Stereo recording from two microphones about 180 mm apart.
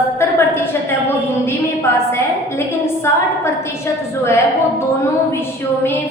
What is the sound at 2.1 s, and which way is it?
A woman's voice, 15° left (ahead or behind).